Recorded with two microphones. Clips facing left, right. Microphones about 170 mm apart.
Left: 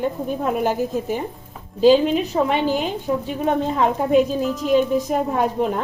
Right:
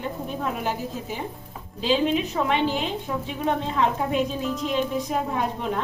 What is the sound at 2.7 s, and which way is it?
A woman's voice, 45° left (ahead or behind).